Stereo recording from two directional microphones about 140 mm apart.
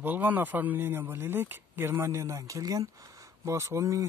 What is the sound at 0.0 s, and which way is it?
Speech, 15° right (ahead or behind).